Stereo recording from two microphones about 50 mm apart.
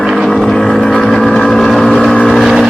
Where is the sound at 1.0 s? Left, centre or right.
Centre.